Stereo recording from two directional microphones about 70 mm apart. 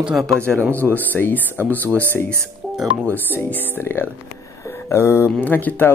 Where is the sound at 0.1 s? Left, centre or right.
Centre.